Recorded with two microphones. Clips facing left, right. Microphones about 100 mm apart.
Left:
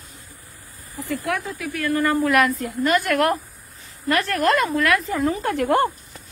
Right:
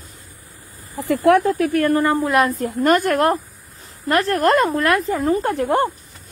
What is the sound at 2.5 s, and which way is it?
A woman's voice, 45° right (ahead or behind).